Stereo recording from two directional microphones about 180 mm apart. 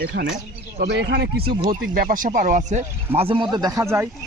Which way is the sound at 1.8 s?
55° right (ahead or behind).